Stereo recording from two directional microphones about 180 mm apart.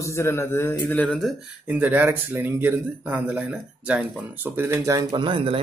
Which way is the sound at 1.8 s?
10° right (ahead or behind).